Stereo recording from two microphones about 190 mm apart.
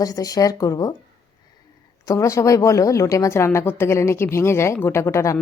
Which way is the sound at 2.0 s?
15° left (ahead or behind).